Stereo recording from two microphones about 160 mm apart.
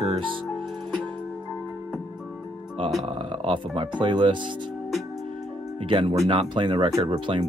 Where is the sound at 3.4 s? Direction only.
30° right (ahead or behind).